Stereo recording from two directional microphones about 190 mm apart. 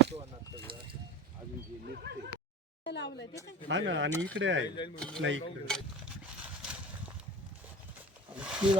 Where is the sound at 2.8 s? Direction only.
65° left (ahead or behind).